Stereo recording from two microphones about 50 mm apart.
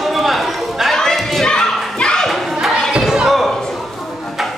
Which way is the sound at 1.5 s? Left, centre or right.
Centre.